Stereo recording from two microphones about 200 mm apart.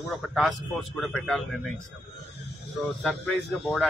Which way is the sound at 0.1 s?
Centre (ahead or behind).